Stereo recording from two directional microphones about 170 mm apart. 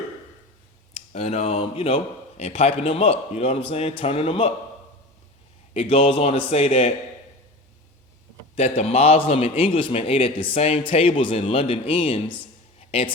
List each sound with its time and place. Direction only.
0.9 s a man's voice: 40° left (ahead or behind)
5.7 s a man's voice: 35° left (ahead or behind)
8.5 s a man's voice: 40° left (ahead or behind)